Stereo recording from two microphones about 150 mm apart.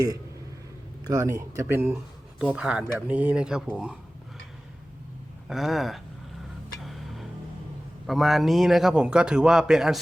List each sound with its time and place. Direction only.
1.0 s speech: 20° right (ahead or behind); by 3.9 s 5° right (ahead or behind)
5.5 s a man's voice: centre (ahead or behind)
6.8 s music: centre (ahead or behind)
8.0 s a man's voice: centre (ahead or behind)